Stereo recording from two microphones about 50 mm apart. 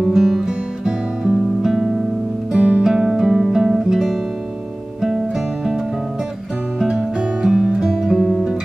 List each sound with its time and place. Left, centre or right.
0.0 s guitar: centre
2.5 s music: right
2.8 s music: centre
8.2 s music: centre